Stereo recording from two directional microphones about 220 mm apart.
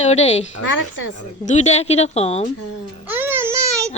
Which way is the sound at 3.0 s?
10° right (ahead or behind).